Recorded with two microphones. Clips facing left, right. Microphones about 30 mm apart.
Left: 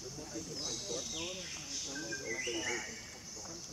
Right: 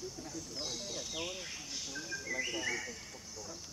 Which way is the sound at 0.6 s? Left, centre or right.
Centre.